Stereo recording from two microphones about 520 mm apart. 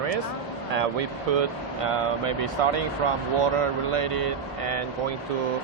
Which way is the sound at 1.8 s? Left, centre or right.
Right.